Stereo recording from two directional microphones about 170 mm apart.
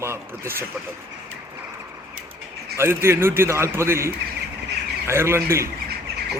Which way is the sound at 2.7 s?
15° right (ahead or behind).